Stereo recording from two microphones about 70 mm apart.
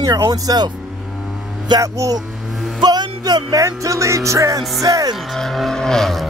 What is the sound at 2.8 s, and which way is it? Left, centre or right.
Music, right.